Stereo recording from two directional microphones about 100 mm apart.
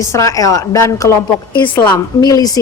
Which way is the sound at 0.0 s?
30° left (ahead or behind).